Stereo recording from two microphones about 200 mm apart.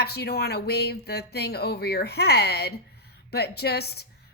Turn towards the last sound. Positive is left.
turn(degrees=55)  # may be behind; listen again after turning